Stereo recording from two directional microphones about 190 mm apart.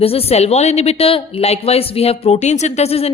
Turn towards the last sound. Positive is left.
turn(degrees=35)  # may be behind; listen again after turning